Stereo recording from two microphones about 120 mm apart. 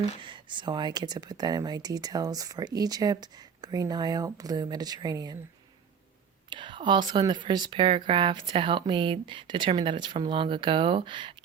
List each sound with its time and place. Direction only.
0.3 s speech: 40° right (ahead or behind)
6.5 s speech: 40° right (ahead or behind)